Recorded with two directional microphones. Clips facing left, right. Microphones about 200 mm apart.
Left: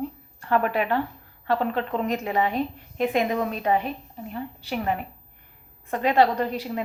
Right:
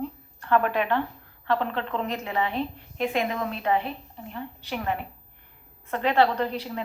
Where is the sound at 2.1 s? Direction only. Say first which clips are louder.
Left 4 dB; 40° left (ahead or behind).